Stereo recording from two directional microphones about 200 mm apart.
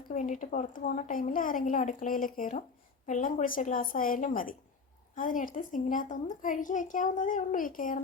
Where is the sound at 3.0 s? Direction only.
40° left (ahead or behind).